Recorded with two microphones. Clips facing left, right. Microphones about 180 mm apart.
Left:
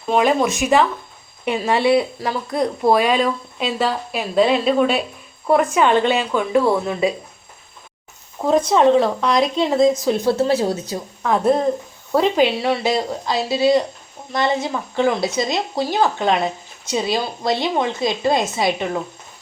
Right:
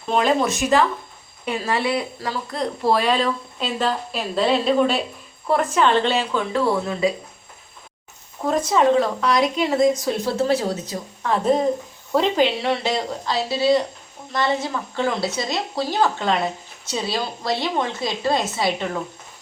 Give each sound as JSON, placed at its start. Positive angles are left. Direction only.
{"t": 0.2, "sound": "a woman's voice", "side_deg": 15}
{"t": 2.5, "sound": "a woman's voice", "side_deg": 15}
{"t": 8.4, "sound": "speech", "side_deg": 40}
{"t": 9.0, "sound": "a woman's voice", "side_deg": 25}
{"t": 12.1, "sound": "a woman's voice", "side_deg": 5}